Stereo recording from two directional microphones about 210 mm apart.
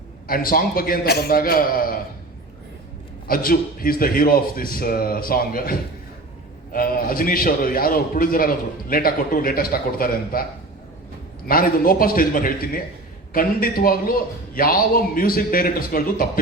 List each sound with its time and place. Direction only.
0.3 s a man's voice: 45° left (ahead or behind)
3.2 s a man's voice: 45° left (ahead or behind)
6.7 s a man's voice: 45° left (ahead or behind)
11.4 s a man's voice: 45° left (ahead or behind)